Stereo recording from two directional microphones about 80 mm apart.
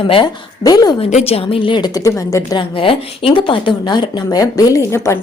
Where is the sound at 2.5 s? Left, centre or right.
Left.